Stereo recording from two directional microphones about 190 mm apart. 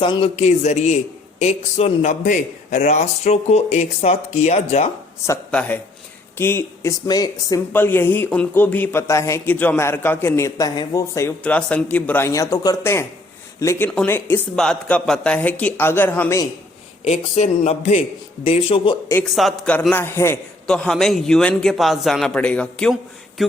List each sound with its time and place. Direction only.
0.0 s a man's voice: 25° left (ahead or behind)
5.2 s speech: 10° left (ahead or behind)
17.1 s a man's voice: 35° left (ahead or behind)
19.3 s a man's voice: centre (ahead or behind)